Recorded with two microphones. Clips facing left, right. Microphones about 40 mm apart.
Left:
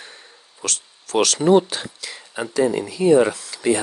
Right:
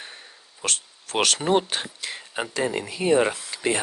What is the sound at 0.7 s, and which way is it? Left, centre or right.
Speech, right.